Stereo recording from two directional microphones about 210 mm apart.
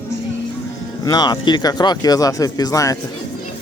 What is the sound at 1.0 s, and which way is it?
A man's voice, 20° left (ahead or behind).